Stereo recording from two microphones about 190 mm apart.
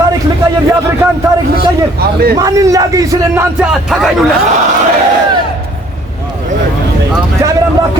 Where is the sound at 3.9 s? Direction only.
Centre (ahead or behind).